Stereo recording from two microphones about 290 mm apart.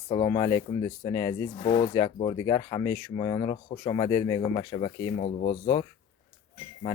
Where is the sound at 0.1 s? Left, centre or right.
Centre.